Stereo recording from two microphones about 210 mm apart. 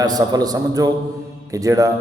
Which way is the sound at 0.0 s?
15° right (ahead or behind).